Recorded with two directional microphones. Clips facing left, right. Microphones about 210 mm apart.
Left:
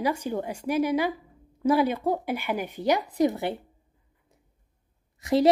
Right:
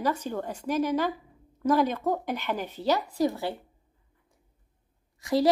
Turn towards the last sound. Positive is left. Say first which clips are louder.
# left 2 dB
turn(degrees=20)  # may be behind; listen again after turning